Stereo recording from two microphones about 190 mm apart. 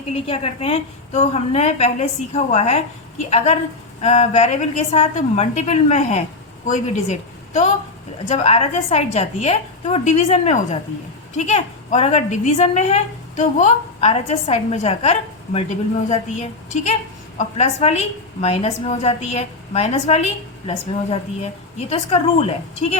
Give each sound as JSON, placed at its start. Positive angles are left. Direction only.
{"t": 0.3, "sound": "a woman's voice", "side_deg": 30}